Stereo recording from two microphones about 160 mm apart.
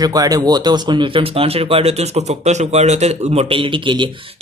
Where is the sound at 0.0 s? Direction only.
25° right (ahead or behind).